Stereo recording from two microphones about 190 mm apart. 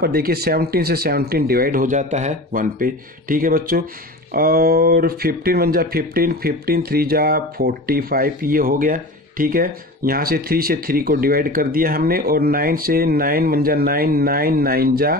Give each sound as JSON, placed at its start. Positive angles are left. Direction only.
{"t": 0.0, "sound": "speech", "side_deg": -55}